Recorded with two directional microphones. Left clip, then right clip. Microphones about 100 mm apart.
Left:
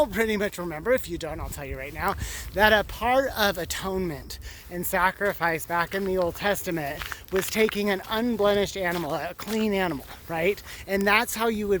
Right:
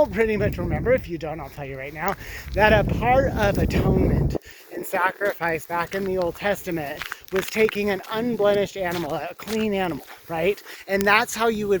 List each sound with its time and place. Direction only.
0.0 s speech: 30° left (ahead or behind)
6.0 s speech: 40° left (ahead or behind)